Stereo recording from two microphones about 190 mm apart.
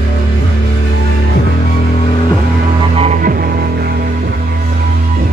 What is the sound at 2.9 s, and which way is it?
Music, 35° right (ahead or behind).